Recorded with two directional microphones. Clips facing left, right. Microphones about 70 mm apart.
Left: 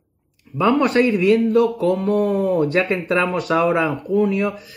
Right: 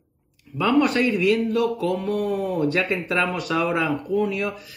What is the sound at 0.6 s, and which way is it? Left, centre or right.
Speech, left.